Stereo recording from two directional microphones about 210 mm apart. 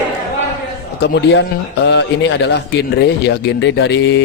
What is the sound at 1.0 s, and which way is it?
A man's voice, 55° left (ahead or behind).